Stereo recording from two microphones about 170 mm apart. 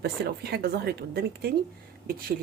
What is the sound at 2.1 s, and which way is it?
Speech, 55° right (ahead or behind).